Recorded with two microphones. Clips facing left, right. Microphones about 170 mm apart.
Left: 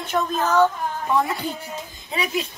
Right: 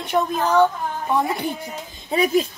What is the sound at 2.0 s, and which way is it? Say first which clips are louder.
Speech: right 7 dB; 40° right (ahead or behind).